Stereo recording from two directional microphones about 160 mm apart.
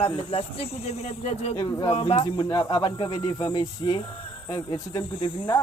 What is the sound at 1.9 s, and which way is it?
Speech, 40° left (ahead or behind).